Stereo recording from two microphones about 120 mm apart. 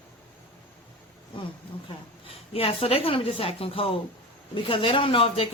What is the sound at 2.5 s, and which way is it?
Speech, 55° left (ahead or behind).